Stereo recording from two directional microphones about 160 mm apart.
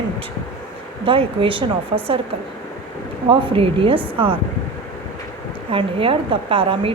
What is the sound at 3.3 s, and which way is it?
A woman's voice, 35° right (ahead or behind).